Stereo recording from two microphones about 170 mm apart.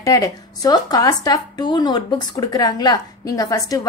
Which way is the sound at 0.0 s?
20° left (ahead or behind).